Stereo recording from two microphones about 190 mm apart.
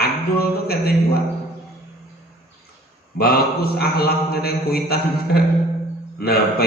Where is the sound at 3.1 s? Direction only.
55° left (ahead or behind).